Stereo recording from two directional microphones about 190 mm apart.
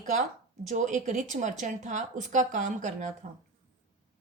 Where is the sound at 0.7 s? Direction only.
40° right (ahead or behind).